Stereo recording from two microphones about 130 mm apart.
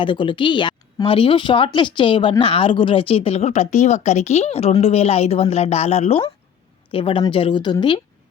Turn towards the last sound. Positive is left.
turn(degrees=40)  # may be behind; listen again after turning